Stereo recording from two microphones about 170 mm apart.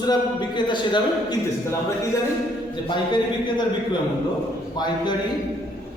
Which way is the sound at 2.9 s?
25° left (ahead or behind).